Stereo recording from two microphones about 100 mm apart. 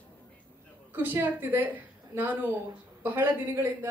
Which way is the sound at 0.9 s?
20° right (ahead or behind).